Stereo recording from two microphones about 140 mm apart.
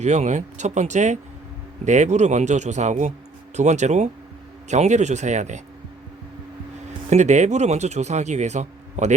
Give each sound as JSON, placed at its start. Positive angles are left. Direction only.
{"t": 0.0, "sound": "speech", "side_deg": -55}
{"t": 7.1, "sound": "speech", "side_deg": -55}